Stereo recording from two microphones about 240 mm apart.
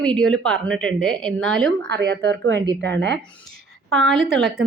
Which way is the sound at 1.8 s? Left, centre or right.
Right.